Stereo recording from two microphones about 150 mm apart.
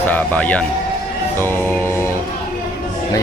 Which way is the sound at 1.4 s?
15° left (ahead or behind).